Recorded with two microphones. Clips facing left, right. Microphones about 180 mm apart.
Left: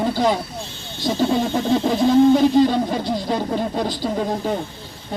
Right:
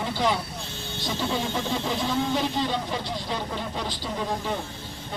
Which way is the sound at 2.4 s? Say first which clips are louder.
Left 12 dB; 45° left (ahead or behind).